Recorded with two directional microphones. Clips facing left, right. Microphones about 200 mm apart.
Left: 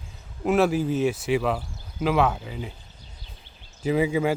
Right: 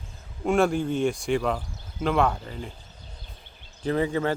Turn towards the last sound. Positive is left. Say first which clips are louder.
# left 2 dB
turn(degrees=10)  # may be behind; listen again after turning